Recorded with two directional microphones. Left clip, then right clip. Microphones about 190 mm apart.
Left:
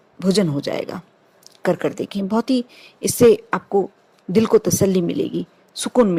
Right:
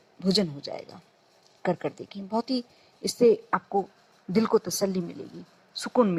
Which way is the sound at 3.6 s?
25° left (ahead or behind).